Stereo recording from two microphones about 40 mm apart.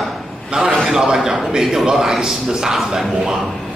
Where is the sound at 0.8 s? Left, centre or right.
Centre.